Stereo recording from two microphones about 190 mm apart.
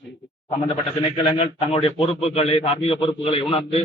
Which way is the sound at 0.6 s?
30° left (ahead or behind).